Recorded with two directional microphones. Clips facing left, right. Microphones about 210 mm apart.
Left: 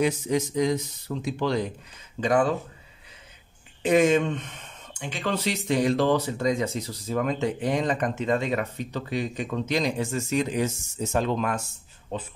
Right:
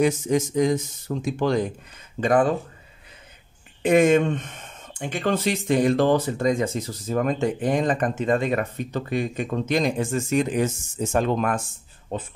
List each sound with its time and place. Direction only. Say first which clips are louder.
0.0 s speech: right 3 dB; 45° right (ahead or behind)
3.8 s speech: right 3 dB; 55° right (ahead or behind)